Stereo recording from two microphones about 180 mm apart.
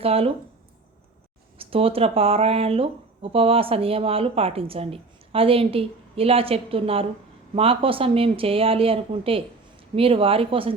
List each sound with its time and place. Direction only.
0.0 s speech: 30° right (ahead or behind)
1.5 s speech: 30° right (ahead or behind)